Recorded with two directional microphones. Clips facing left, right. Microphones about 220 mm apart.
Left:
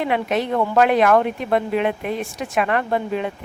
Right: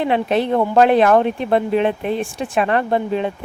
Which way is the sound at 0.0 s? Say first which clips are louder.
Right 3 dB; 30° right (ahead or behind).